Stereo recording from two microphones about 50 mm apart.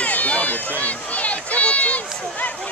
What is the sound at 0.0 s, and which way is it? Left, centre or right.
Run, left.